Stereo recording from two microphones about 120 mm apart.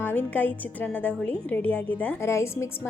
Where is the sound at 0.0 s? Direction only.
15° left (ahead or behind).